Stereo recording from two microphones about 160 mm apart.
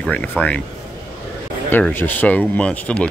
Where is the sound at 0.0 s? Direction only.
10° left (ahead or behind).